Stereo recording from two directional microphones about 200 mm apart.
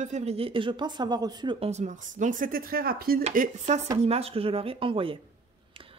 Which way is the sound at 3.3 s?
35° right (ahead or behind).